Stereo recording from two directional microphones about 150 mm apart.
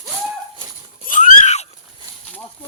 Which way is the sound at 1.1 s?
60° left (ahead or behind).